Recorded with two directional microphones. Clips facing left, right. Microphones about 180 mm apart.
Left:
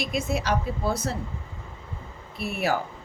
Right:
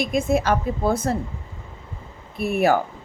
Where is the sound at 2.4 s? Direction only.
50° right (ahead or behind).